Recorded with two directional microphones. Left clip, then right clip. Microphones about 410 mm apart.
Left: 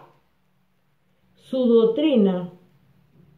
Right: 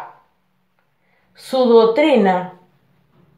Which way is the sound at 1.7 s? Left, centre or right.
Right.